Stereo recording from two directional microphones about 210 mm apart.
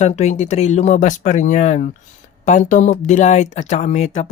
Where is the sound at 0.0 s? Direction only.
30° left (ahead or behind).